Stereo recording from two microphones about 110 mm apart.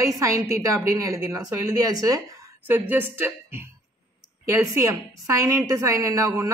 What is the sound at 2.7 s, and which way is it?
A woman's voice, 15° right (ahead or behind).